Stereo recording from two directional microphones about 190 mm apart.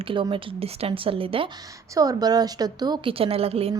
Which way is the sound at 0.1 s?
25° right (ahead or behind).